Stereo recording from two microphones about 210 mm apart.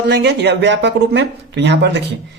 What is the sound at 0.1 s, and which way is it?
Speech, 55° right (ahead or behind).